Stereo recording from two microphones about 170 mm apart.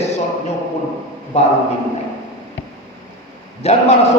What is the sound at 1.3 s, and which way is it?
Speech, 40° left (ahead or behind).